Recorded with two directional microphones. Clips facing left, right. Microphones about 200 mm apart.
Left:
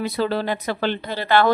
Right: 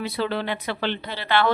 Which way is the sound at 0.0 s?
45° left (ahead or behind).